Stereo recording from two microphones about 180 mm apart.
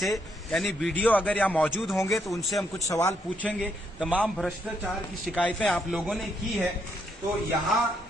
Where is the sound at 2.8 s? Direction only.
15° left (ahead or behind); by 6.7 s centre (ahead or behind).